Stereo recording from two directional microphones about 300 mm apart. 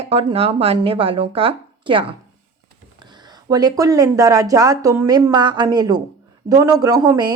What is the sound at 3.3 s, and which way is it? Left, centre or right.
A woman's voice, centre.